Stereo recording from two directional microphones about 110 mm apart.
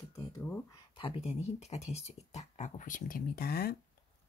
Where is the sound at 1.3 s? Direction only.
85° left.